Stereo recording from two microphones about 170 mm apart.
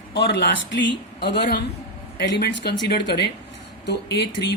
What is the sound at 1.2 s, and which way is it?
Speech, 75° left (ahead or behind).